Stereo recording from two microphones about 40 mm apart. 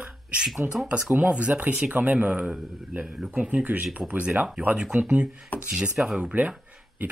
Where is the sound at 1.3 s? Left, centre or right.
Right.